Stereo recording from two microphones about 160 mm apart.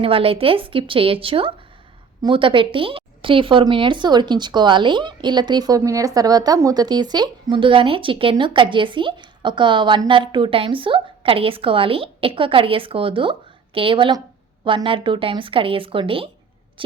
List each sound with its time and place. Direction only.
0.0 s a woman's voice: 35° right (ahead or behind)